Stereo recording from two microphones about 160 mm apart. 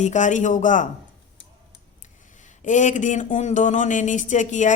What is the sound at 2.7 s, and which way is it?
Speech, 50° left (ahead or behind).